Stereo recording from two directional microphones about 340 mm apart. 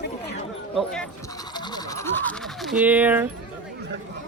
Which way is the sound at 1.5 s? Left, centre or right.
Centre.